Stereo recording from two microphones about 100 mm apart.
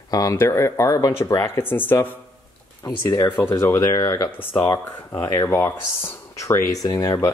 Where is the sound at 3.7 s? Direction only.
35° left (ahead or behind).